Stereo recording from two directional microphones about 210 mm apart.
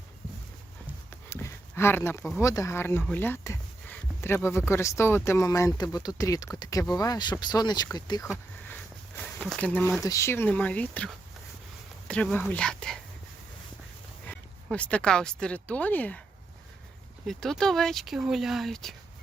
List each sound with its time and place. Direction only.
1.3 s a sound: 10° left (ahead or behind)
2.4 s speech: 15° left (ahead or behind)
3.0 s a sound: 10° left (ahead or behind)
4.7 s speech: 15° left (ahead or behind)
8.7 s speech: 10° left (ahead or behind)
14.3 s speech: 5° left (ahead or behind)
17.2 s speech: centre (ahead or behind)